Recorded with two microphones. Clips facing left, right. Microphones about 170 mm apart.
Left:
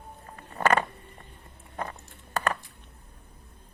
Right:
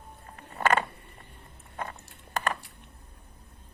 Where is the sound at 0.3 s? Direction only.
40° left (ahead or behind).